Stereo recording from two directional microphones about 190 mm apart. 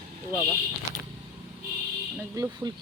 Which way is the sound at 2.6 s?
20° right (ahead or behind).